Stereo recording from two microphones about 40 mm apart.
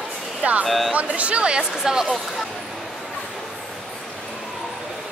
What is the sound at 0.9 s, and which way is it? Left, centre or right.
Speech, right.